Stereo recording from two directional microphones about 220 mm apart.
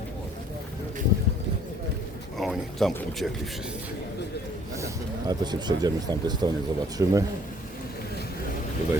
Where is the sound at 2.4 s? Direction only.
Centre (ahead or behind).